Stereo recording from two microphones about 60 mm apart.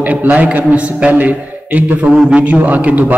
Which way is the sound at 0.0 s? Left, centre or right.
Right.